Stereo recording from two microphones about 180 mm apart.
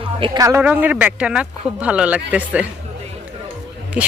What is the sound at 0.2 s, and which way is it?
Speech, 20° right (ahead or behind).